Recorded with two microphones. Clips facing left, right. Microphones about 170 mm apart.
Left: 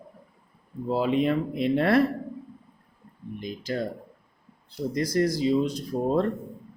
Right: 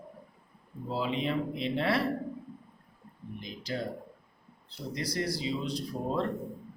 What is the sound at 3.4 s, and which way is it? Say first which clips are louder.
A man's voice: left 6 dB; 50° left (ahead or behind).